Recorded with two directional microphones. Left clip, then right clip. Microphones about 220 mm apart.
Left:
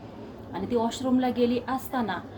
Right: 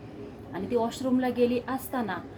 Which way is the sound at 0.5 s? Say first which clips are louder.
Left 1 dB; 5° right (ahead or behind).